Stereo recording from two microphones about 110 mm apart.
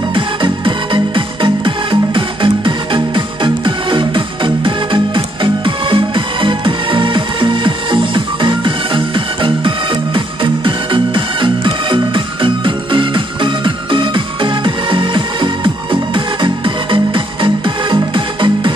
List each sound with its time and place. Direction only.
0.1 s music: 50° right (ahead or behind)